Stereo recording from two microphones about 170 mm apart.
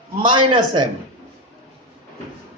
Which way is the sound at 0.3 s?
30° right (ahead or behind).